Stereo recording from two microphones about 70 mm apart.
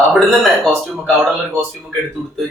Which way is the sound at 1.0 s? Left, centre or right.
Right.